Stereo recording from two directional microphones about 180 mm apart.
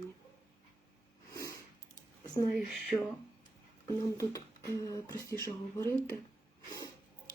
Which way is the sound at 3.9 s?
15° left (ahead or behind).